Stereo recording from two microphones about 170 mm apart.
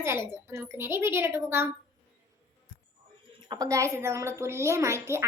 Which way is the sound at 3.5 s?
20° right (ahead or behind).